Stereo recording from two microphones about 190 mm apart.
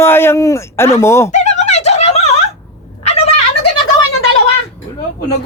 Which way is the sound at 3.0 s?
35° left (ahead or behind).